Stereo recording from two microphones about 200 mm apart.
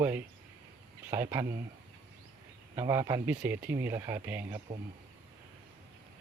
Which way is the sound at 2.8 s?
15° right (ahead or behind).